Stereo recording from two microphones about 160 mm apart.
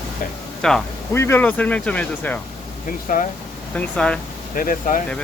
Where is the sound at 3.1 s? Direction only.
55° left (ahead or behind).